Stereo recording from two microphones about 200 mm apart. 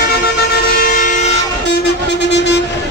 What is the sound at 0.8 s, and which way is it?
Train, 40° left (ahead or behind).